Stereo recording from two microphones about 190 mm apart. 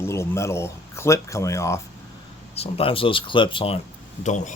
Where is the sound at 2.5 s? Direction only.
30° left (ahead or behind).